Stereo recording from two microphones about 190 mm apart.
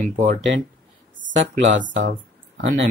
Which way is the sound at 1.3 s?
75° right (ahead or behind).